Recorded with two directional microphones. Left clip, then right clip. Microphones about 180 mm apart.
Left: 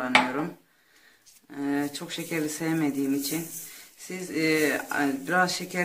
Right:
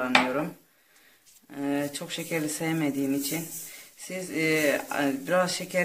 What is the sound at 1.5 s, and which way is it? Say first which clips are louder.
Speech: even; 40° right (ahead or behind).